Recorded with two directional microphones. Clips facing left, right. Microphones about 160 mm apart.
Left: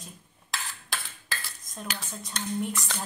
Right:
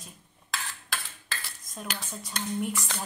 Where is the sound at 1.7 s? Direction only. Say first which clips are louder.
Even; 5° right (ahead or behind).